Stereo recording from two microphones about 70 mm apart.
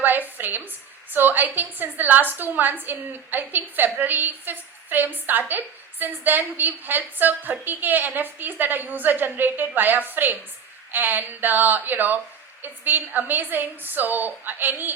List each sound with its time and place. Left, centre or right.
0.0 s a woman's voice: right